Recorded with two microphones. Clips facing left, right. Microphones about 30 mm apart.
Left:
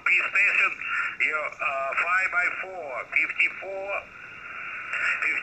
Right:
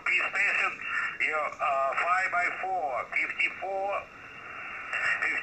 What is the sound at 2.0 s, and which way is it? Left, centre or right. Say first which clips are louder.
Speech: left 3 dB; centre.